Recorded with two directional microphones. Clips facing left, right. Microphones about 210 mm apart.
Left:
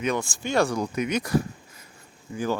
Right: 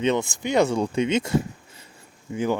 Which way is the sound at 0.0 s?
20° right (ahead or behind).